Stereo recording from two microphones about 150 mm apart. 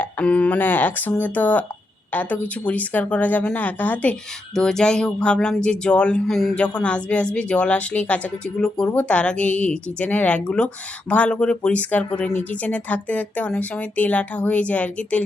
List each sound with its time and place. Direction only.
0.0 s speech: 10° left (ahead or behind)